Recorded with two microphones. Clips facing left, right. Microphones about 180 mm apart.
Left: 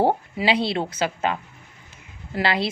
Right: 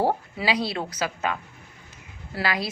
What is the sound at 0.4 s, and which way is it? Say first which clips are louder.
Speech: left 4 dB; 25° left (ahead or behind).